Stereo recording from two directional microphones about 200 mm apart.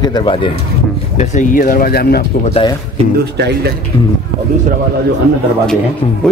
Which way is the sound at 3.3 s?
55° right (ahead or behind).